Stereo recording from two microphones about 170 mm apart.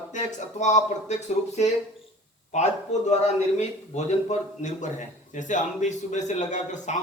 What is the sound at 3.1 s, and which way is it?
A man's voice, 40° left (ahead or behind).